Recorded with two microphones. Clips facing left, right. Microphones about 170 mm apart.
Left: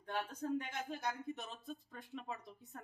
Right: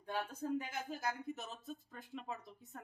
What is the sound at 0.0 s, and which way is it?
Speech, 10° right (ahead or behind).